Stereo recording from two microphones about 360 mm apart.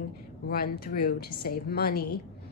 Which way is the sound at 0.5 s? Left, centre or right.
Left.